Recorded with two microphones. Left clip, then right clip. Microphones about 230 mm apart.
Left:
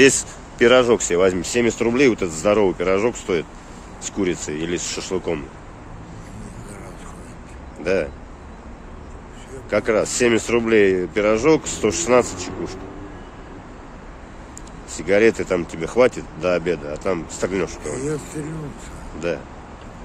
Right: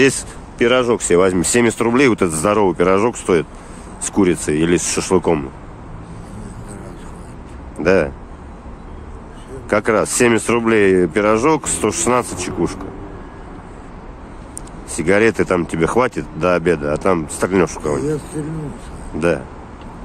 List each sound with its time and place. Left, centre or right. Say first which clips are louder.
0.0 s speech: left 1 dB; centre
7.8 s speech: right 7 dB; right
9.7 s speech: right 3 dB; right
15.0 s speech: right 2 dB; right
18.0 s speech: right 4 dB; centre
19.1 s speech: right 8 dB; right